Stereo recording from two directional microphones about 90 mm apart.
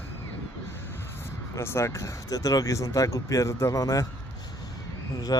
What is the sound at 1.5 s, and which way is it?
Speech, 30° left (ahead or behind).